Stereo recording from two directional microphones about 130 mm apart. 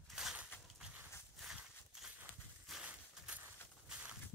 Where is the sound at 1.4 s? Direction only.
Centre (ahead or behind).